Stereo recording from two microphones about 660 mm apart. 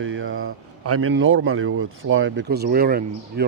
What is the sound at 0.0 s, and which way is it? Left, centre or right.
A man's voice, centre.